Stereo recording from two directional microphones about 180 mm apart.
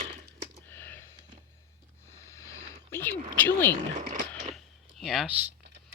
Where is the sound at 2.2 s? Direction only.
15° left (ahead or behind).